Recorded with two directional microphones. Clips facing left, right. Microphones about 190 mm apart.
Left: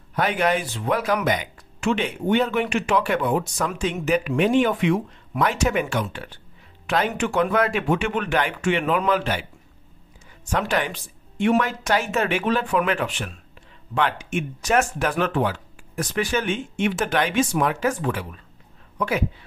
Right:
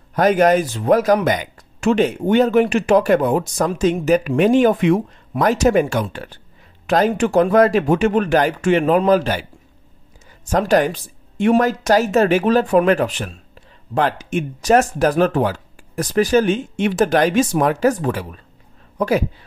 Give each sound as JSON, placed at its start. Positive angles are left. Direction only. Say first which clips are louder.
{"t": 0.1, "sound": "speech", "louder": "right 8 dB", "side_deg": -40}
{"t": 10.5, "sound": "speech", "louder": "right 8 dB", "side_deg": -40}